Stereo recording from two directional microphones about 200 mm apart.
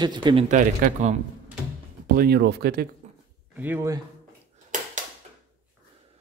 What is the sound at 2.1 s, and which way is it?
Speech, 50° right (ahead or behind).